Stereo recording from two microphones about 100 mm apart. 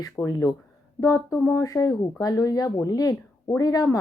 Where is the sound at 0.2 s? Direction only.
35° left (ahead or behind).